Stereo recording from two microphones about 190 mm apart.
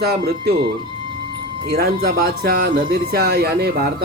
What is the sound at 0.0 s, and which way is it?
Speech, 55° right (ahead or behind).